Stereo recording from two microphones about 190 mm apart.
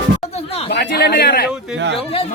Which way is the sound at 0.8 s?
55° left (ahead or behind).